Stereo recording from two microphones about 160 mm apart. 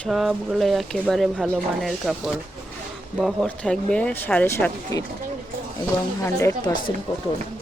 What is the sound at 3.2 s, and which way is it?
Speech, 5° left (ahead or behind).